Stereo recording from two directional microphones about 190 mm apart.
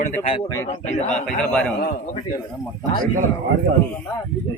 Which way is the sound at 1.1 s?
5° left (ahead or behind).